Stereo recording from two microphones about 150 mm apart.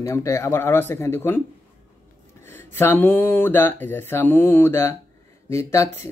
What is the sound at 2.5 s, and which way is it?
Speech, 15° left (ahead or behind).